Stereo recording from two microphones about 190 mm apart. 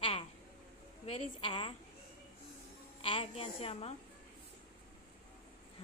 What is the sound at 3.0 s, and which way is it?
Speech, 30° left (ahead or behind).